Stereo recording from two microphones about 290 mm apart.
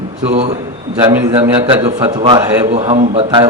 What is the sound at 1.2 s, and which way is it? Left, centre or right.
A man's voice, centre.